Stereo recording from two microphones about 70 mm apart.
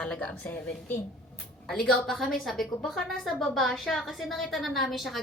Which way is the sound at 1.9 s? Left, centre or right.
Centre.